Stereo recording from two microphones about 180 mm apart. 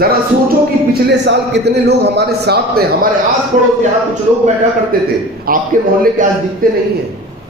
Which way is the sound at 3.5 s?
45° right (ahead or behind).